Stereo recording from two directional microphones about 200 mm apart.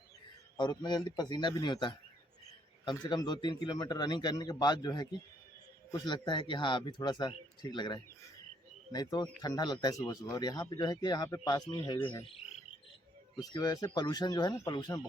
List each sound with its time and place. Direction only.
0.5 s a man's voice: 20° left (ahead or behind)
13.3 s a man's voice: 20° left (ahead or behind)